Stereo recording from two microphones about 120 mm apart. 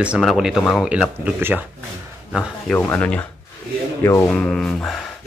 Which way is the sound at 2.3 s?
Centre (ahead or behind).